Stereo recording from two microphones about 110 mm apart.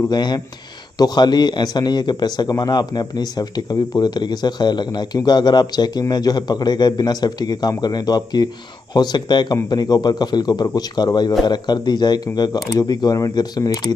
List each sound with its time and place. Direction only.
0.1 s speech: 40° left (ahead or behind)